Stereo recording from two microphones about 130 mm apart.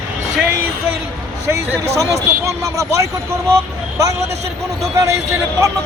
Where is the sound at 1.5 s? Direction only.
25° right (ahead or behind).